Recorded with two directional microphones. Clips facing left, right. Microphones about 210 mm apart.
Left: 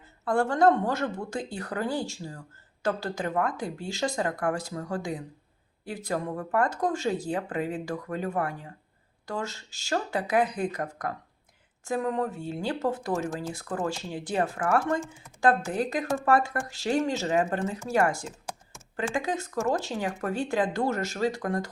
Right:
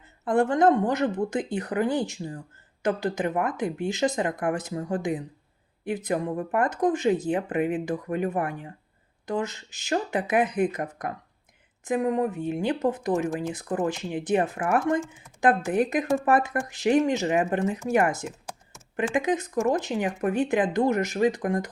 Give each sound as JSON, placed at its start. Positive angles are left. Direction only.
{"t": 0.3, "sound": "speech", "side_deg": -20}